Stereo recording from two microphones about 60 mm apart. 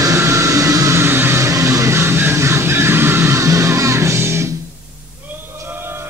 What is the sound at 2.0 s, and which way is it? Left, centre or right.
Music, right.